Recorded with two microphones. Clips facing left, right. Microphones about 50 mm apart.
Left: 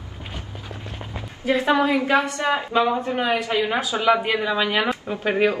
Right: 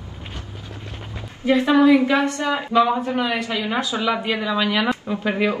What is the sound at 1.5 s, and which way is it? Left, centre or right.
A man's voice, left.